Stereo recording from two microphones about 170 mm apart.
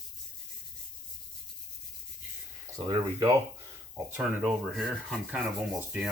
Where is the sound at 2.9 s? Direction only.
20° right (ahead or behind); by 5.4 s 5° right (ahead or behind).